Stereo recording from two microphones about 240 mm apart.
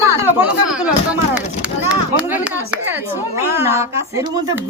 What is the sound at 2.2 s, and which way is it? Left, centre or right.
A woman's voice, centre.